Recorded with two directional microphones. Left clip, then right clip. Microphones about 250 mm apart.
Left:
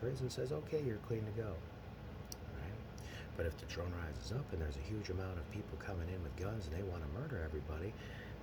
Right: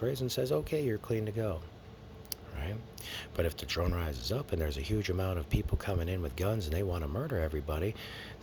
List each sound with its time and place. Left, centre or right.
0.1 s speech: right
2.6 s speech: right